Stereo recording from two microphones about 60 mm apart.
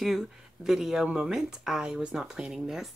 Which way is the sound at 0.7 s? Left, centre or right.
Centre.